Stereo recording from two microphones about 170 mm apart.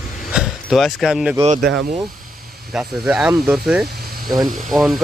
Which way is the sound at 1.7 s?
90° right.